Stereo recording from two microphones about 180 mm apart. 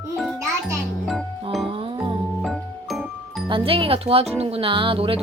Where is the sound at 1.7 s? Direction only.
30° right (ahead or behind).